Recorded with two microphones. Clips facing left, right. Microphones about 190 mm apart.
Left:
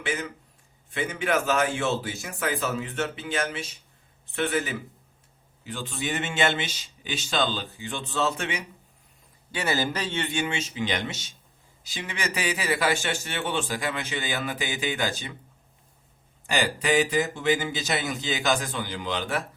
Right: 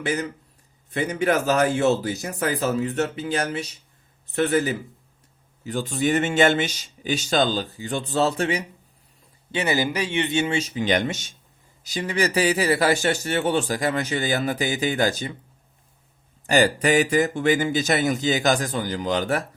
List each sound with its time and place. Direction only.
0.0 s speech: 40° right (ahead or behind)
9.5 s speech: 20° right (ahead or behind)
10.5 s speech: 40° right (ahead or behind)
16.5 s speech: 45° right (ahead or behind)